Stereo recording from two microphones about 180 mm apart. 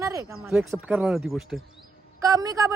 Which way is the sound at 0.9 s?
Centre (ahead or behind).